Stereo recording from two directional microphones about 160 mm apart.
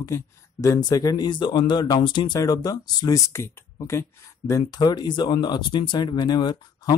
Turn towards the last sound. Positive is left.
turn(degrees=25)  # may be behind; listen again after turning